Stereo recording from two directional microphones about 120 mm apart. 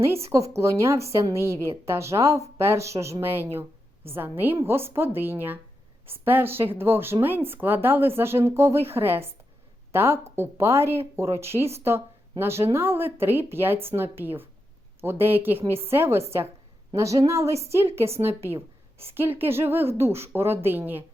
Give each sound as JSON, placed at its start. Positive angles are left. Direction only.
{"t": 0.0, "sound": "a woman's voice", "side_deg": -20}